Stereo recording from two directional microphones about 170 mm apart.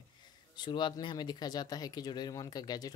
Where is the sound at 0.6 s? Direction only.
25° left (ahead or behind).